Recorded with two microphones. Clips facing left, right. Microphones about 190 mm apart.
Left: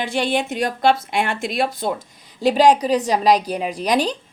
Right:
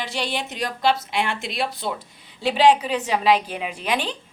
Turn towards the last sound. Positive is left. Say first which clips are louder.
# left 6 dB
turn(degrees=40)  # may be behind; listen again after turning